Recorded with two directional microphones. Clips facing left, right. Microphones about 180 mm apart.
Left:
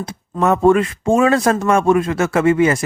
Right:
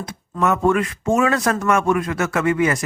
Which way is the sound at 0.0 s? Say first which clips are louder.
Left 3 dB; 30° left (ahead or behind).